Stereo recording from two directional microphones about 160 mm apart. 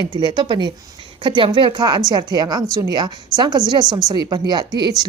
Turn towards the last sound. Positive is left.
turn(degrees=-30)  # may be behind; listen again after turning